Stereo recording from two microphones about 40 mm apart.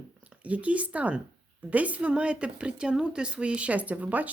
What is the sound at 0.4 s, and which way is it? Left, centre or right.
Speech, right.